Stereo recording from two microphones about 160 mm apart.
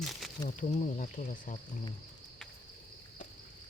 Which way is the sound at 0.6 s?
50° left (ahead or behind).